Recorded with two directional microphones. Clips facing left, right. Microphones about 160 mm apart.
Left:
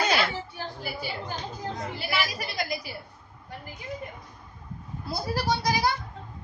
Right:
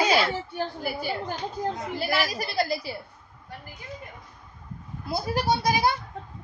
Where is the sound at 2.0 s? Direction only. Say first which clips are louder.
Right 5 dB; 40° right (ahead or behind).